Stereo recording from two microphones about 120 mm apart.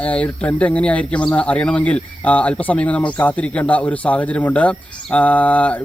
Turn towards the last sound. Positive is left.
turn(degrees=10)  # may be behind; listen again after turning